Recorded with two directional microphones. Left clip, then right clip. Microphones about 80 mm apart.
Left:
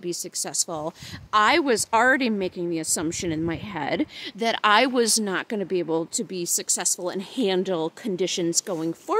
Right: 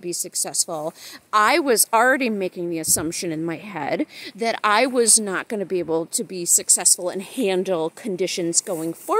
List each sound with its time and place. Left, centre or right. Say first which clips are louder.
0.0 s speech: right 2 dB; left
4.4 s speech: right 1 dB; left
5.2 s speech: right 2 dB; left
6.3 s speech: right 6 dB; left